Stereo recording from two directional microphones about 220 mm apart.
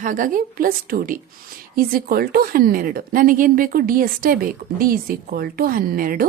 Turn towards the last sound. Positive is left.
turn(degrees=-40)  # may be behind; listen again after turning